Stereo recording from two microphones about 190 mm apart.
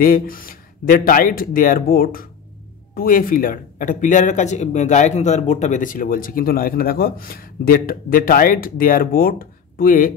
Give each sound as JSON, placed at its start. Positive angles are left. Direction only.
{"t": 0.0, "sound": "speech", "side_deg": 50}